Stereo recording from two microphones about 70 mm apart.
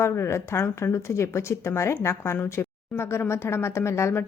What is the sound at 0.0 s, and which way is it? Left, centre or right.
A woman's voice, left.